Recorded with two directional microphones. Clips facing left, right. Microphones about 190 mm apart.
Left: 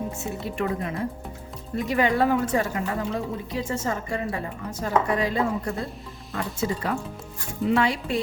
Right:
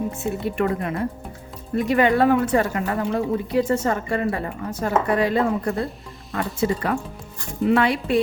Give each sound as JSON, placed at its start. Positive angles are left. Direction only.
{"t": 0.3, "sound": "a woman's voice", "side_deg": -60}